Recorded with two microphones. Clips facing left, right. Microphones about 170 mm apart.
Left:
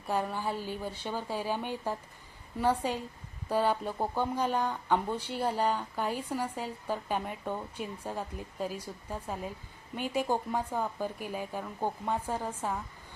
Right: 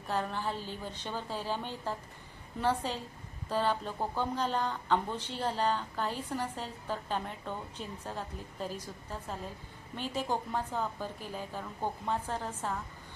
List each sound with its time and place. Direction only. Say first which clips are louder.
0.1 s speech: left 2 dB; 10° left (ahead or behind)